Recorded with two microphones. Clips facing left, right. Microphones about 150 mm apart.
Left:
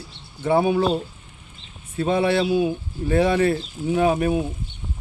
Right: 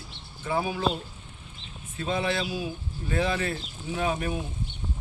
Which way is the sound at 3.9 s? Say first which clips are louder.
Left 9 dB; 50° left (ahead or behind).